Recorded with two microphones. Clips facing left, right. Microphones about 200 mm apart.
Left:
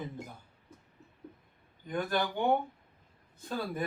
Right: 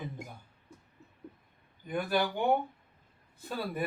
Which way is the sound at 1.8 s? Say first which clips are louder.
Right 1 dB; 10° right (ahead or behind).